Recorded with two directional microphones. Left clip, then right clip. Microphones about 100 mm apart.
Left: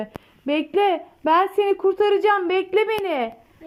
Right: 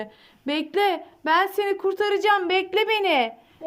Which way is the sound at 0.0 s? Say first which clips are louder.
Left 3 dB; 5° left (ahead or behind).